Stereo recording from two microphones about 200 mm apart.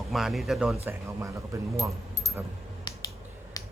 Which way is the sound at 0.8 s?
15° right (ahead or behind).